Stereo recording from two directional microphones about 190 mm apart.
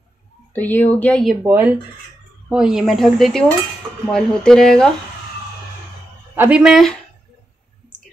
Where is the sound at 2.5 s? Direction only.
5° right (ahead or behind).